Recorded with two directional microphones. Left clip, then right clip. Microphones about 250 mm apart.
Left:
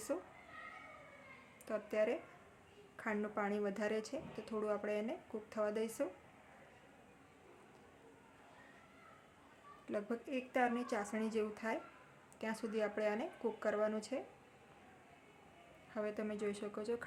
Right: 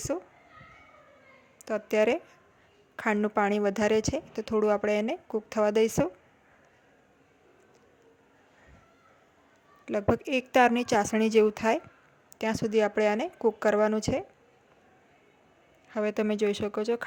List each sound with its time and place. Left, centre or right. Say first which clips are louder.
0.1 s speech: right 8 dB; right
1.6 s speech: right 12 dB; right
9.8 s speech: right 15 dB; right
15.9 s speech: right 13 dB; right